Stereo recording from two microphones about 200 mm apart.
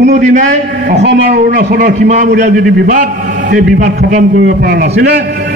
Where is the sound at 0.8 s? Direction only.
50° right (ahead or behind).